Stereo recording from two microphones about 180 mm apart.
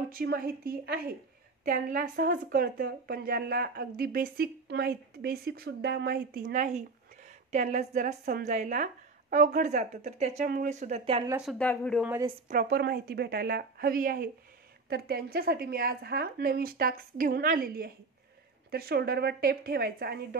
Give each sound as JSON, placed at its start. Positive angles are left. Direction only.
{"t": 0.1, "sound": "a woman's voice", "side_deg": -55}
{"t": 11.2, "sound": "speech", "side_deg": -5}
{"t": 11.5, "sound": "speech", "side_deg": 10}
{"t": 12.4, "sound": "a woman's voice", "side_deg": -55}